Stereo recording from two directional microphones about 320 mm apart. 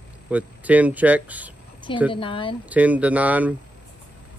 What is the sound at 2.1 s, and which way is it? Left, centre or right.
Speech, centre.